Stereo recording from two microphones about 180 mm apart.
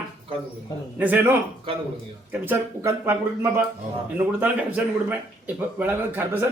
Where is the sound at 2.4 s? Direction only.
10° right (ahead or behind).